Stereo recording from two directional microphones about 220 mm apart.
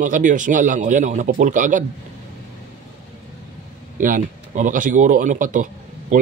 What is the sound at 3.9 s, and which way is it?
A man's voice, 35° right (ahead or behind).